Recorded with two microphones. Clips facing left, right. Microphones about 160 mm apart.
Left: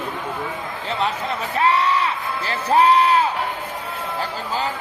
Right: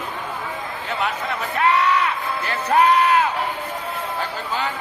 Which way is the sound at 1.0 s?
30° left (ahead or behind).